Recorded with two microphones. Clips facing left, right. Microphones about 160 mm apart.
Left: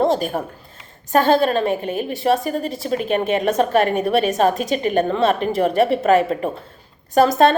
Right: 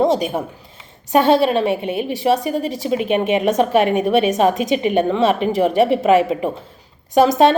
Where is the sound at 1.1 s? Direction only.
5° right (ahead or behind).